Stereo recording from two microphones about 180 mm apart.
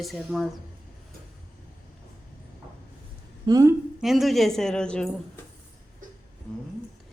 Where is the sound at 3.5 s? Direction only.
20° right (ahead or behind).